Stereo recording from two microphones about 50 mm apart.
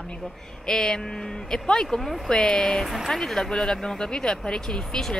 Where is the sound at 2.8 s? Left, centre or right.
Centre.